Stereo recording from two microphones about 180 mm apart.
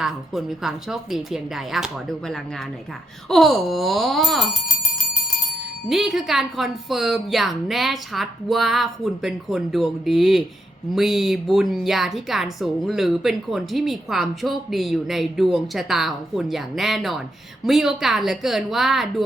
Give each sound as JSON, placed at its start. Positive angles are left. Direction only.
{"t": 0.0, "sound": "speech", "side_deg": 0}
{"t": 4.7, "sound": "alarm clock", "side_deg": 45}
{"t": 5.9, "sound": "speech", "side_deg": 0}